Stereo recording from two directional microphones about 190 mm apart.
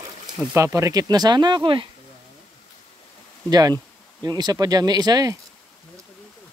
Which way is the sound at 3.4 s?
20° right (ahead or behind).